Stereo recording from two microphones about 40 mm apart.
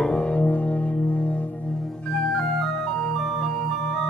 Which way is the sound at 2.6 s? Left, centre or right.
Centre.